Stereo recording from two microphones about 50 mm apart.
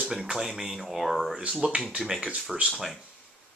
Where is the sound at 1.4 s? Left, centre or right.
Centre.